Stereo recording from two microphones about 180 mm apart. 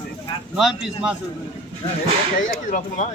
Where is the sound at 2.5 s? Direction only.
50° left (ahead or behind).